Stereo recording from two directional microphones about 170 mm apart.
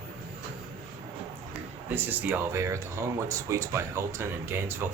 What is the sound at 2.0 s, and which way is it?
Speech, 10° right (ahead or behind).